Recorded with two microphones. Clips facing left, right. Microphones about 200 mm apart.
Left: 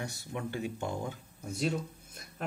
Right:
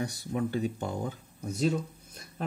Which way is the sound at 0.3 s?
35° right (ahead or behind).